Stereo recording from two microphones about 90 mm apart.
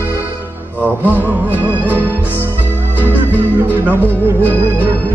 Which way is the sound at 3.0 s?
20° left (ahead or behind).